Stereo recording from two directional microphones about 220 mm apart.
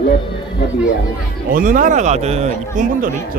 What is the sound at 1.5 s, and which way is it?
Speech, 40° right (ahead or behind).